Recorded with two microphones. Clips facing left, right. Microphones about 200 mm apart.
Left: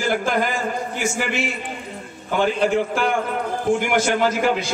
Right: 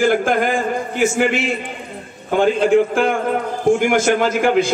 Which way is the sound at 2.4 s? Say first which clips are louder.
Right 6 dB; 55° right (ahead or behind).